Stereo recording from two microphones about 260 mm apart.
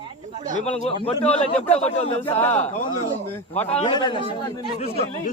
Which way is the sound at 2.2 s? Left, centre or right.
Centre.